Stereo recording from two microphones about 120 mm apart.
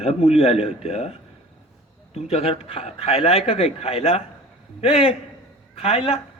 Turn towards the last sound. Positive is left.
turn(degrees=55)  # may be behind; listen again after turning